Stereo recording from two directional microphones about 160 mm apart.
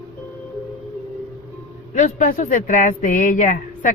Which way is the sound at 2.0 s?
50° left (ahead or behind).